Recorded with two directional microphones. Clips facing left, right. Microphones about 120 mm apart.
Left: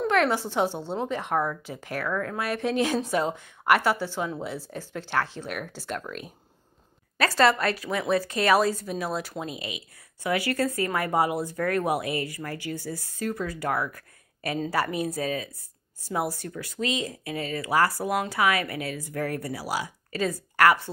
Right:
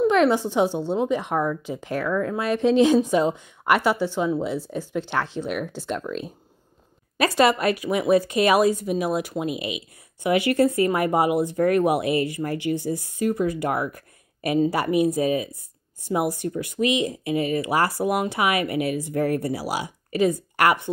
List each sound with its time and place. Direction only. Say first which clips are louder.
0.0 s speech: right 5 dB; 20° right (ahead or behind)